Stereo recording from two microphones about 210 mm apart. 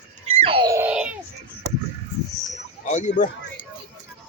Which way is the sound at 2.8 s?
35° left (ahead or behind).